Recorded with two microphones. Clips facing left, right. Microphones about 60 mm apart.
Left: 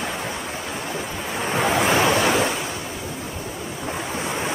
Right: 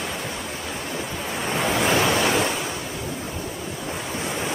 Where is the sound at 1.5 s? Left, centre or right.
Centre.